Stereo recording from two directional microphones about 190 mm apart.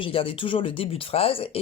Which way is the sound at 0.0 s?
30° left (ahead or behind).